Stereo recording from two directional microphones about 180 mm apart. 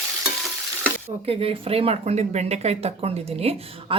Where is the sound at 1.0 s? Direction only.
35° right (ahead or behind).